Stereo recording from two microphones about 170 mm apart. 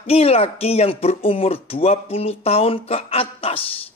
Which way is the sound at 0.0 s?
35° left (ahead or behind).